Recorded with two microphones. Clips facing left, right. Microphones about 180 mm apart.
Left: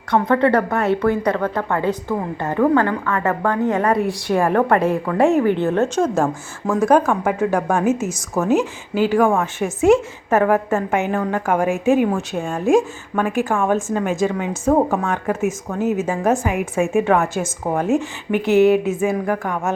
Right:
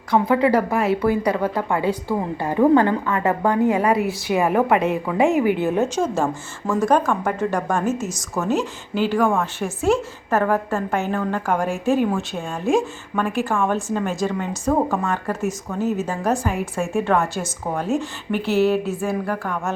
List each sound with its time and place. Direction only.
0.1 s a woman's voice: 5° right (ahead or behind); by 19.5 s 15° left (ahead or behind)